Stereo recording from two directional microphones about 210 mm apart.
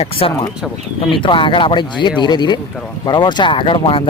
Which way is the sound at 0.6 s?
Centre (ahead or behind).